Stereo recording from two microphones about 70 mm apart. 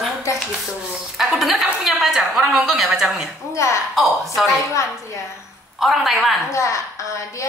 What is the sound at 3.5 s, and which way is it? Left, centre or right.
Speech, left.